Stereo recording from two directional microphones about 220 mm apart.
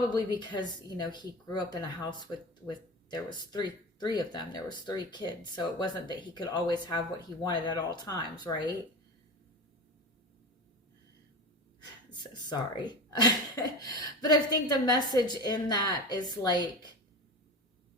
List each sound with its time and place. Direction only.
0.1 s a woman's voice: 20° left (ahead or behind)
12.5 s a woman's voice: 20° left (ahead or behind)